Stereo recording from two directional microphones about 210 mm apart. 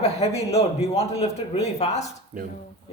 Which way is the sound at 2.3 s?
40° right (ahead or behind).